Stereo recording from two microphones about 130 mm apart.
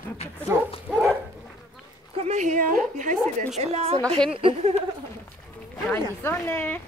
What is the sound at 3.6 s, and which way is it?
A woman's voice, 55° right (ahead or behind).